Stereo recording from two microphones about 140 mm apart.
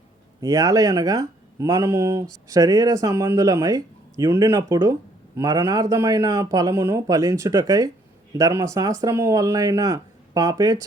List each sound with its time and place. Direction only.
0.4 s speech: 25° right (ahead or behind)